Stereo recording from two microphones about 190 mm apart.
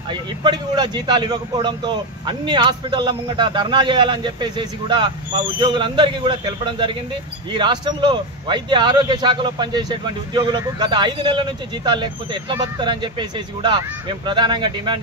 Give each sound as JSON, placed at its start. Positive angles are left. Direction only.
{"t": 0.1, "sound": "speech", "side_deg": -25}